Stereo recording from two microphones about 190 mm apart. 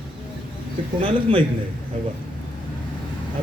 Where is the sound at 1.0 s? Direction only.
30° right (ahead or behind).